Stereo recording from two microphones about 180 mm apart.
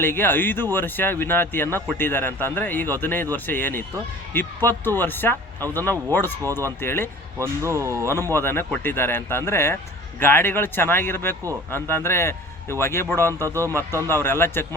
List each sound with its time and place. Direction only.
0.0 s speech: 10° left (ahead or behind)
7.3 s speech: 15° right (ahead or behind)
8.1 s a man's voice: 15° left (ahead or behind)
13.5 s speech: 15° right (ahead or behind)
13.9 s speech: 15° left (ahead or behind)